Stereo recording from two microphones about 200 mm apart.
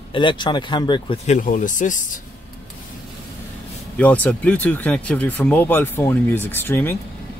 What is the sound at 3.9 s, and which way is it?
Speech, 5° left (ahead or behind).